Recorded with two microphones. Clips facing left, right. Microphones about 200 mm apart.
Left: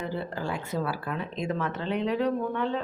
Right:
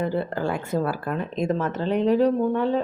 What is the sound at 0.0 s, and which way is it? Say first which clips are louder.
Speech: right 7 dB; 55° right (ahead or behind).